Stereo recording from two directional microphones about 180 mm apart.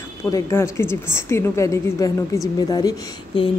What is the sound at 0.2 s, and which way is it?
A woman's voice, 15° left (ahead or behind).